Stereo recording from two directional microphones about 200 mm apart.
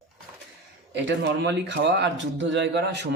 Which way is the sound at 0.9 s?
60° right (ahead or behind).